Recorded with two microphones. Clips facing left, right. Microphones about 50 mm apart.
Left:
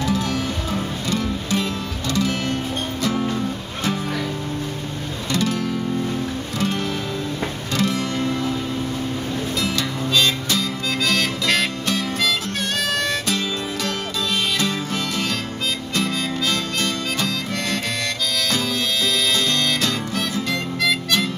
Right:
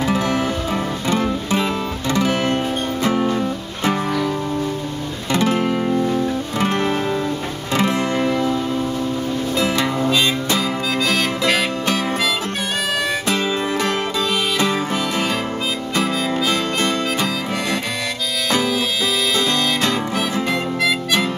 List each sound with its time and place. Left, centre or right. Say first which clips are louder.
0.0 s music: right 4 dB; right
5.3 s music: right 5 dB; right
9.6 s music: right 8 dB; right
11.0 s harmonica: right 1 dB; centre
13.3 s music: right 5 dB; right
16.0 s harmonica: right 4 dB; centre
19.8 s music: right 4 dB; centre